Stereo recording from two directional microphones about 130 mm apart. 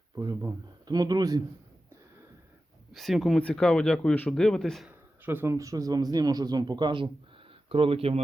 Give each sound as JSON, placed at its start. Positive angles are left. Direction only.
{"t": 0.2, "sound": "speech", "side_deg": -30}
{"t": 2.9, "sound": "speech", "side_deg": 0}
{"t": 4.9, "sound": "speech", "side_deg": -15}